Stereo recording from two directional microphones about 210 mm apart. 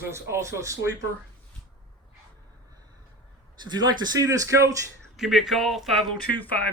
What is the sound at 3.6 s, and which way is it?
Speech, 20° right (ahead or behind).